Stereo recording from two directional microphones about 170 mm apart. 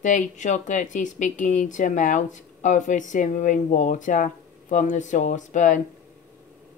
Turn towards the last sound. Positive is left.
turn(degrees=45)  # may be behind; listen again after turning